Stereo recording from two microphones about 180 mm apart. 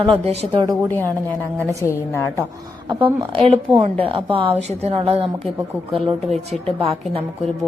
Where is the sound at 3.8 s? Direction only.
30° right (ahead or behind).